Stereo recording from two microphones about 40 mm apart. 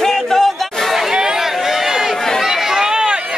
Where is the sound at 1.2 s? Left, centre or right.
Centre.